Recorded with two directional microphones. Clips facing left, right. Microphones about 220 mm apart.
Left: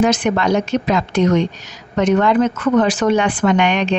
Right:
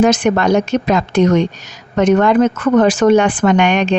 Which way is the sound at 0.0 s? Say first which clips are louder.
Right 3 dB; 45° right (ahead or behind).